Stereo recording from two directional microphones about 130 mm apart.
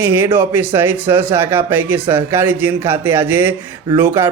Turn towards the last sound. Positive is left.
turn(degrees=-15)  # may be behind; listen again after turning